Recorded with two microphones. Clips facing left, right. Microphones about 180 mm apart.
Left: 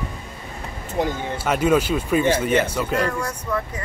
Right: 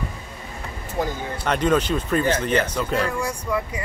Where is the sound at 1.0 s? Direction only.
20° left (ahead or behind).